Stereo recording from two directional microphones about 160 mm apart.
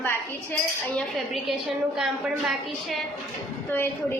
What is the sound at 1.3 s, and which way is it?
A woman's voice, centre (ahead or behind).